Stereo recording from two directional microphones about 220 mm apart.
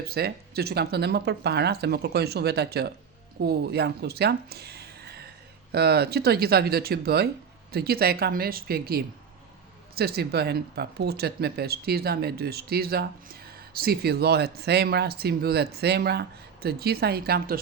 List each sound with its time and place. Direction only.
0.1 s speech: 45° right (ahead or behind)